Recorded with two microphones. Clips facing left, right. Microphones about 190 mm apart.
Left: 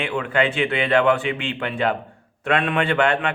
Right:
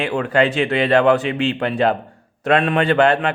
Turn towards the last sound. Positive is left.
turn(degrees=-35)  # may be behind; listen again after turning